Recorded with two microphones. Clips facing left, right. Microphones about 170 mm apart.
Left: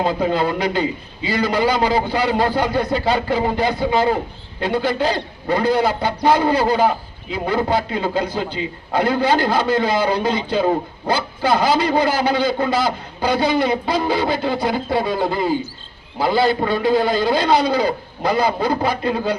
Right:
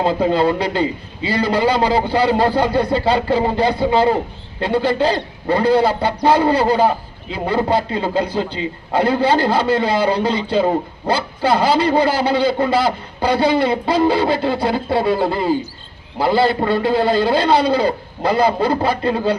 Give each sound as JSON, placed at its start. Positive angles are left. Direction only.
{"t": 0.3, "sound": "a man's voice", "side_deg": -30}
{"t": 16.2, "sound": "a man's voice", "side_deg": -30}